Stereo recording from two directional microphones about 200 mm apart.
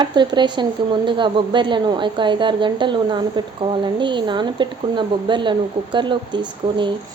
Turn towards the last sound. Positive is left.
turn(degrees=-25)  # may be behind; listen again after turning